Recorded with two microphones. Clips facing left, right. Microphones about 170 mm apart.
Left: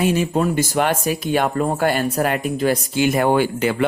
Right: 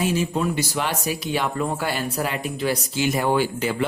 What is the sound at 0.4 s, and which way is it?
Speech, 50° left (ahead or behind).